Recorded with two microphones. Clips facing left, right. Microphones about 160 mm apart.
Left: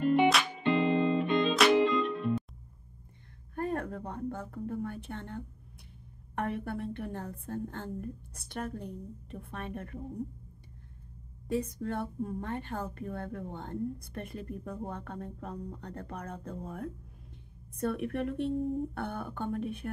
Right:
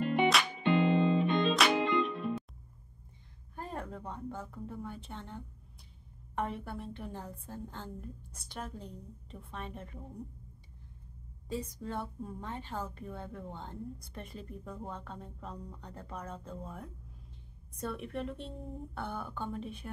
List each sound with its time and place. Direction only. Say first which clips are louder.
0.0 s music: left 3 dB; centre (ahead or behind)
3.5 s a sound: left 7 dB; 55° left (ahead or behind)
4.5 s a woman's voice: left 6 dB; 60° left (ahead or behind)
6.3 s a woman's voice: left 3 dB; 60° left (ahead or behind)
11.4 s a woman's voice: left 6 dB; 60° left (ahead or behind)